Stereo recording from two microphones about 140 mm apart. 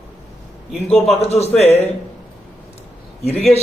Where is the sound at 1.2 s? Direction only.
50° left (ahead or behind).